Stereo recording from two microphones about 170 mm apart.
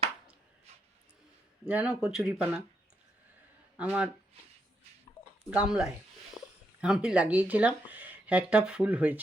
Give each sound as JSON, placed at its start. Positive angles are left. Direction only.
{"t": 1.6, "sound": "speech", "side_deg": -10}
{"t": 3.8, "sound": "speech", "side_deg": -10}
{"t": 5.5, "sound": "speech", "side_deg": -5}
{"t": 6.4, "sound": "a sound", "side_deg": 15}
{"t": 6.8, "sound": "speech", "side_deg": -5}